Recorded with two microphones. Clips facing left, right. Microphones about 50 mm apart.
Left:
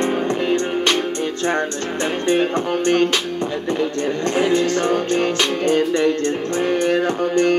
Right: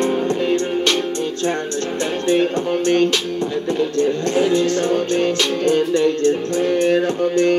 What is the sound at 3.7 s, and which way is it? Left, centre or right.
Music, left.